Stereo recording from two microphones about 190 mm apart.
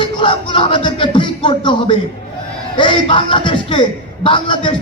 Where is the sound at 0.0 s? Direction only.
25° left (ahead or behind).